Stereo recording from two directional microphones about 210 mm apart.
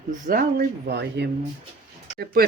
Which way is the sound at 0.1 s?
40° right (ahead or behind).